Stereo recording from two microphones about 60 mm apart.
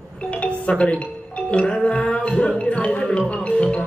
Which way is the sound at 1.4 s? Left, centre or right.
Centre.